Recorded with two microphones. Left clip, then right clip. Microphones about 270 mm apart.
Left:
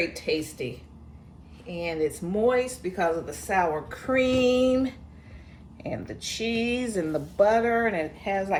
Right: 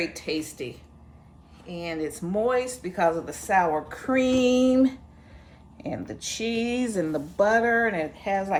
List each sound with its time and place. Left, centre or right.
1.6 s speech: centre; by 8.5 s right